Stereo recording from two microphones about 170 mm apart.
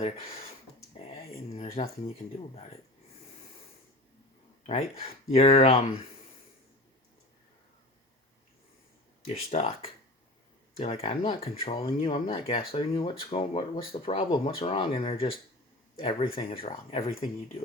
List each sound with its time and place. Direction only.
1.0 s speech: 35° left (ahead or behind)
4.6 s speech: 40° left (ahead or behind)
9.2 s speech: 40° left (ahead or behind)